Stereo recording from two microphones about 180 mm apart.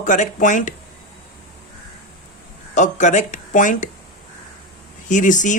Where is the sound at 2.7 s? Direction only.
40° left (ahead or behind).